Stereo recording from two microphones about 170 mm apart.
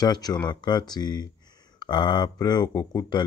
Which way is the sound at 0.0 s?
25° left (ahead or behind).